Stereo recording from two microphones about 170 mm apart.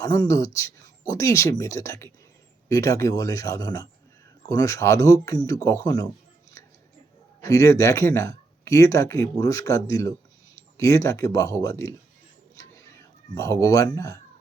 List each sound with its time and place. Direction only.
0.0 s speech: 20° left (ahead or behind)
7.4 s speech: 20° left (ahead or behind)
13.3 s speech: 20° left (ahead or behind)